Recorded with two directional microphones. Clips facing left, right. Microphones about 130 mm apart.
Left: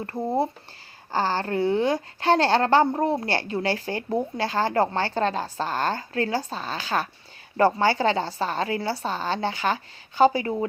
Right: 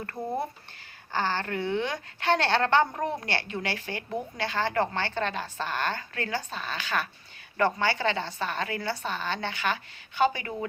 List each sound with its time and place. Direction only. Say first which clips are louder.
0.0 s a woman's voice: left 6 dB; 25° left (ahead or behind)